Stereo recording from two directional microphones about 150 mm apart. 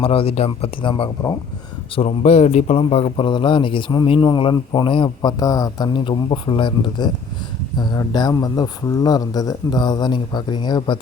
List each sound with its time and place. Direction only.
0.0 s speech: 40° left (ahead or behind)